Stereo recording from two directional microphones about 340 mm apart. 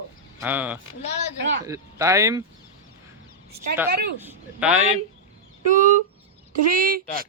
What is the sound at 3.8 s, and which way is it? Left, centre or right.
Speech, right.